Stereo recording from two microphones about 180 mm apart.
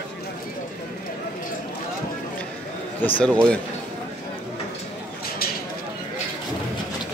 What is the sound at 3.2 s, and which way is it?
Speech, 5° left (ahead or behind).